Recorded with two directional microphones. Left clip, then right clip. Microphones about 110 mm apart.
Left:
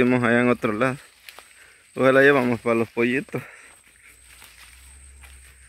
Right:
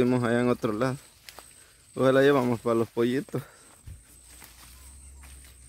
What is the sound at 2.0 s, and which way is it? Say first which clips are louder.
Speech: left 5 dB; centre (ahead or behind).